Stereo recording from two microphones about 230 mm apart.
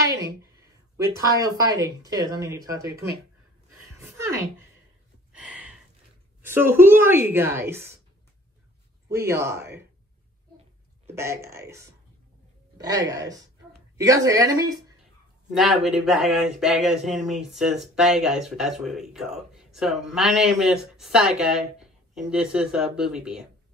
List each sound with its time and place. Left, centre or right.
0.9 s speech: centre
4.0 s a sound: centre
6.4 s speech: centre
9.1 s speech: centre
11.1 s speech: centre
15.5 s speech: centre